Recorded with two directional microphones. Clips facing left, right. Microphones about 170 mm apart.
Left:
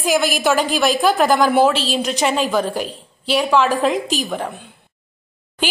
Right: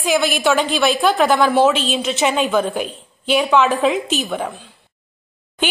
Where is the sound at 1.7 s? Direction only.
35° left (ahead or behind).